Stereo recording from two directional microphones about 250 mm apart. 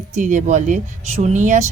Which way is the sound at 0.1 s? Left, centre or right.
Right.